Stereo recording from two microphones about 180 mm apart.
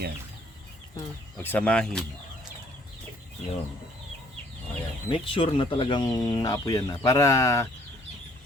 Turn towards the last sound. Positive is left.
turn(degrees=15)  # may be behind; listen again after turning